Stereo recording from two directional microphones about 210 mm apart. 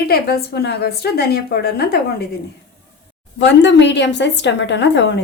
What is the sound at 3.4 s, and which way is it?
A woman's voice, 60° left (ahead or behind).